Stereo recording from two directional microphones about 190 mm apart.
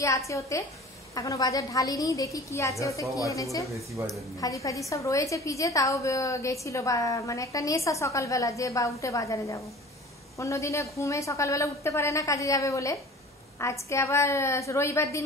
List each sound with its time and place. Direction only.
0.3 s a woman's voice: 15° left (ahead or behind)
4.0 s speech: 10° right (ahead or behind)
4.4 s a woman's voice: 15° left (ahead or behind)